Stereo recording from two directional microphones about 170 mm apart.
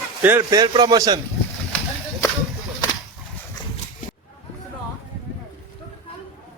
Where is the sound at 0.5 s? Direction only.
20° right (ahead or behind).